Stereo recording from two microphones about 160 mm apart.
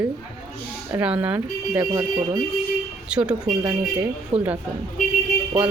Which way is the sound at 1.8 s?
25° right (ahead or behind).